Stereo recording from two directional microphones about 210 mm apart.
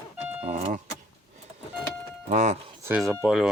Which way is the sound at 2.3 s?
35° right (ahead or behind).